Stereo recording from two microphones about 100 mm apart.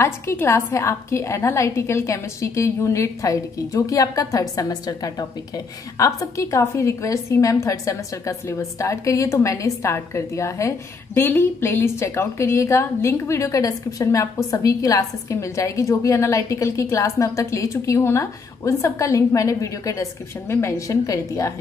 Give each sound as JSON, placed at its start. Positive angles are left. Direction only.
{"t": 0.0, "sound": "a woman's voice", "side_deg": 25}